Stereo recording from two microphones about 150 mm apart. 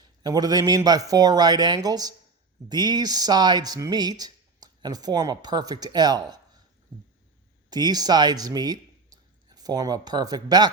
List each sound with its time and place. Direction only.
0.0 s speech: 25° right (ahead or behind)
7.7 s speech: 25° right (ahead or behind)